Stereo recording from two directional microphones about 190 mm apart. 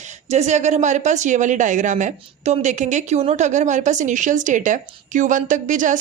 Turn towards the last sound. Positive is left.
turn(degrees=-40)  # may be behind; listen again after turning